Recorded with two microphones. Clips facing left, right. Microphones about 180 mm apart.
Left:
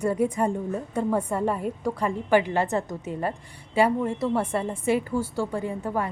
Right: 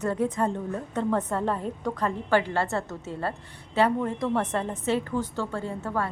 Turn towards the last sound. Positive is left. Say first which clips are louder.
# left 2 dB
turn(degrees=15)  # may be behind; listen again after turning